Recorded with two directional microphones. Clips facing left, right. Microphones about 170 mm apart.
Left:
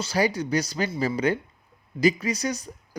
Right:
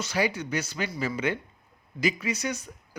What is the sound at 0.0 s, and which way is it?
Speech, 35° left (ahead or behind).